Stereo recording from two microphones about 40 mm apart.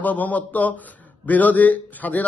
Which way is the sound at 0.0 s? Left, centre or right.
Left.